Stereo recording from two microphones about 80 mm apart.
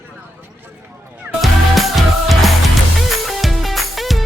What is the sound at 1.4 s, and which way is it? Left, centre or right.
Music, centre.